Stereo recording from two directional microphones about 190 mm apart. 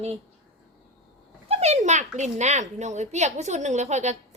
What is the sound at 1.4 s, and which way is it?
A woman's voice, 35° right (ahead or behind).